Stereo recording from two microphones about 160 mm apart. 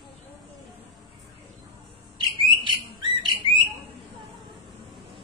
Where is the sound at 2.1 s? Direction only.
30° right (ahead or behind).